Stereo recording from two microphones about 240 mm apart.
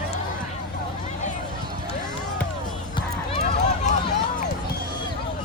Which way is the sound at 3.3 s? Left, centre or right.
Left.